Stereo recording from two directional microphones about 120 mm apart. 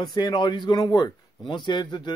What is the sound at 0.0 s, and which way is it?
Speech, 35° left (ahead or behind).